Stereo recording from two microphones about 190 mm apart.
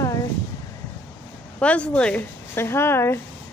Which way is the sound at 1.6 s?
5° left (ahead or behind).